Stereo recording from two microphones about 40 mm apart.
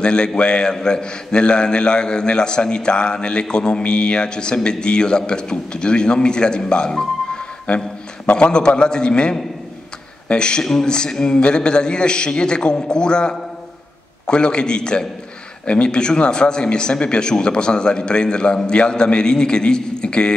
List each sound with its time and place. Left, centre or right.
0.0 s a man's voice: left
10.6 s a man's voice: centre